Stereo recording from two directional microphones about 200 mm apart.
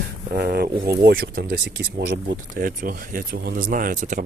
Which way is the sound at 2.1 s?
50° right (ahead or behind).